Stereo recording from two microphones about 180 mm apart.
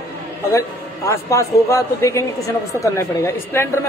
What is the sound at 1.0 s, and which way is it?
A man's voice, 15° left (ahead or behind).